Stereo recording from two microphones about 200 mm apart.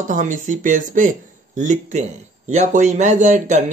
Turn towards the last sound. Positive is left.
turn(degrees=-40)  # may be behind; listen again after turning